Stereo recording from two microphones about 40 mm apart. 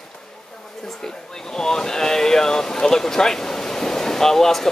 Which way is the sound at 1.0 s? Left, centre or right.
Centre.